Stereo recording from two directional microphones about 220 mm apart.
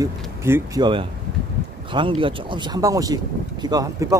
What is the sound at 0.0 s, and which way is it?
Speech, 10° right (ahead or behind).